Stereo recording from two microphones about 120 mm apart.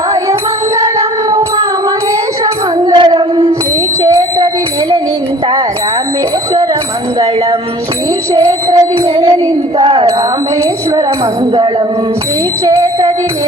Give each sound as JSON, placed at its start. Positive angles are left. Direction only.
{"t": 1.3, "sound": "music", "side_deg": -35}
{"t": 2.4, "sound": "child singing", "side_deg": -35}
{"t": 4.0, "sound": "music", "side_deg": -30}
{"t": 8.3, "sound": "music", "side_deg": -30}
{"t": 9.2, "sound": "a sound", "side_deg": -30}
{"t": 12.6, "sound": "music", "side_deg": -30}